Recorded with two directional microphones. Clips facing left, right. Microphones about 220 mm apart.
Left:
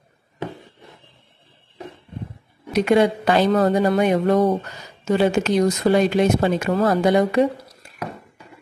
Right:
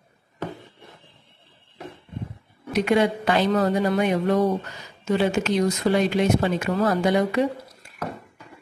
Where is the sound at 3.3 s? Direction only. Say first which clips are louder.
Left 4 dB; 40° left (ahead or behind).